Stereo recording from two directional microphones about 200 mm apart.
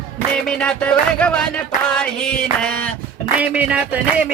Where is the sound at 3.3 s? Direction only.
5° right (ahead or behind).